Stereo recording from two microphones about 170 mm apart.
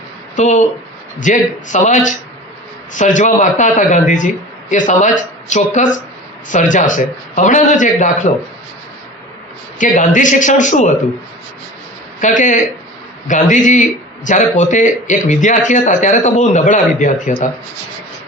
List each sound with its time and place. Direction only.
0.3 s a man's voice: 45° left (ahead or behind)
9.7 s a man's voice: 50° left (ahead or behind)
12.2 s a man's voice: 50° left (ahead or behind)